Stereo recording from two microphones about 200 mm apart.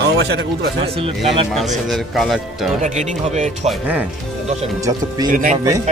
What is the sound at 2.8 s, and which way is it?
Speech, 35° right (ahead or behind).